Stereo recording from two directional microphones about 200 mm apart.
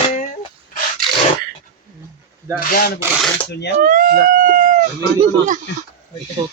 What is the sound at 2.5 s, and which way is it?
Speech, 45° left (ahead or behind).